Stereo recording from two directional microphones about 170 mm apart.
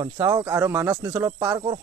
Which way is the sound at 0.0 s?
20° right (ahead or behind).